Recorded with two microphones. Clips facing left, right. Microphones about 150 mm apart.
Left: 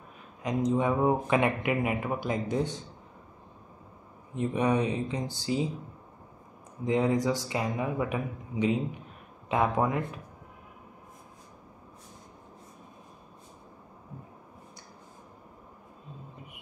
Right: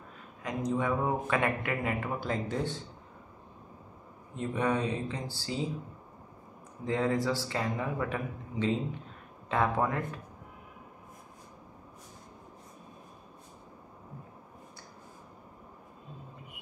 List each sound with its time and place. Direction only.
0.4 s speech: 20° left (ahead or behind)
4.4 s a man's voice: 15° left (ahead or behind)
6.8 s a man's voice: 15° left (ahead or behind)